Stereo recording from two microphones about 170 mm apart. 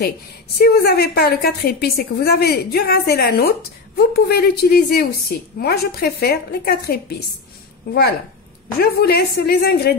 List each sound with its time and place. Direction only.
0.6 s a woman's voice: 70° left (ahead or behind)
8.7 s a woman's voice: 65° left (ahead or behind)